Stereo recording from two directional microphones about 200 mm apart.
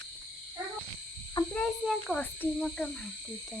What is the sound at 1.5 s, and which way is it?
Cricket, centre (ahead or behind).